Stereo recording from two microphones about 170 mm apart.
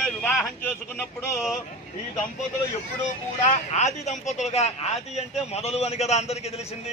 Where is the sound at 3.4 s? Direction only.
40° left (ahead or behind).